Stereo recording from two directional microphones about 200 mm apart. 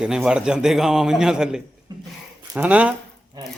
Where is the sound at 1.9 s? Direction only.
20° right (ahead or behind).